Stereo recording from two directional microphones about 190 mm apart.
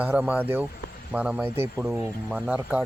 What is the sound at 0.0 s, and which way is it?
Speech, 10° right (ahead or behind).